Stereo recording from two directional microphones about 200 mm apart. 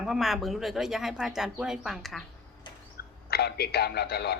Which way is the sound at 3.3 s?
50° left (ahead or behind).